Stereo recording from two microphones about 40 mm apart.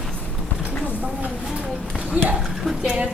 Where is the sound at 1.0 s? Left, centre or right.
Right.